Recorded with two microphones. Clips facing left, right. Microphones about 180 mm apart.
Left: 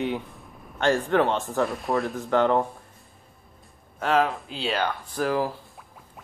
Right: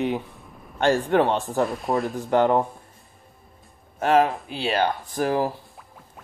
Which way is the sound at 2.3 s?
15° right (ahead or behind).